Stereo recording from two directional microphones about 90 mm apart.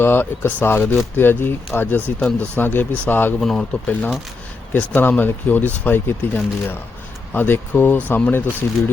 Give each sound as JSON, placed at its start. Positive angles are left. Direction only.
{"t": 0.0, "sound": "speech", "side_deg": 25}
{"t": 3.4, "sound": "speech", "side_deg": 5}
{"t": 4.7, "sound": "speech", "side_deg": 20}